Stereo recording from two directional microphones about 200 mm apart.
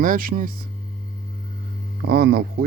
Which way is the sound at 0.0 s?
45° right (ahead or behind).